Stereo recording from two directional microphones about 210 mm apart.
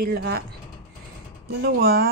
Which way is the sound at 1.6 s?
50° right (ahead or behind).